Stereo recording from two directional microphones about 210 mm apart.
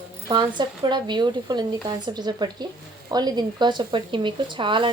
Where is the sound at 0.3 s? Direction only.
20° right (ahead or behind).